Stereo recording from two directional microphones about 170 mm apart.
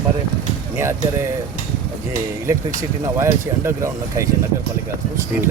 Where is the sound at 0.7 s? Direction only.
15° right (ahead or behind).